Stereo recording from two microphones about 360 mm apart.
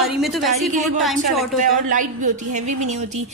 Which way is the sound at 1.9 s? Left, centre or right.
Right.